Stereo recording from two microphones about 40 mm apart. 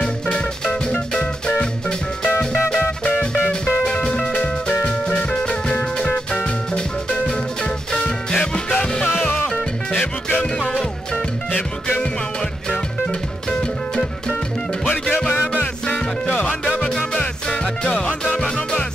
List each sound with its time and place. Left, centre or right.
1.1 s music: left
3.6 s music: left
4.6 s music: left
5.1 s music: left
9.9 s music: left
14.9 s music: left
16.8 s music: left